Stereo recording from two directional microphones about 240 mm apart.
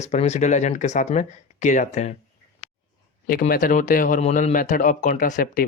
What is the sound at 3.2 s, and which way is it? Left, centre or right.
Speech, left.